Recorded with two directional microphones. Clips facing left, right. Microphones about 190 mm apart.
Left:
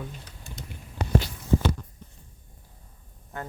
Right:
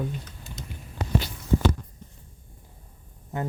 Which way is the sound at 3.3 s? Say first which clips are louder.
Right 6 dB; 20° right (ahead or behind).